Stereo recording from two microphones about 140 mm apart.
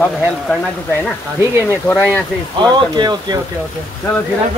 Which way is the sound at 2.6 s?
30° right (ahead or behind).